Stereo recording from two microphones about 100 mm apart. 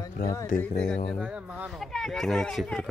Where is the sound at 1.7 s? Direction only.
Centre (ahead or behind).